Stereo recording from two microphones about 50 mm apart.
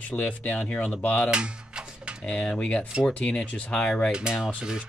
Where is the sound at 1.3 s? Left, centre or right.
Right.